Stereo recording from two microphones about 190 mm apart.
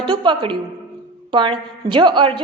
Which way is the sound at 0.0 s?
25° right (ahead or behind).